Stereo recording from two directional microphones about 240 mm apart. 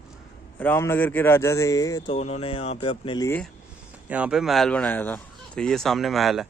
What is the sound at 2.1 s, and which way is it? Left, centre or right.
Speech, left.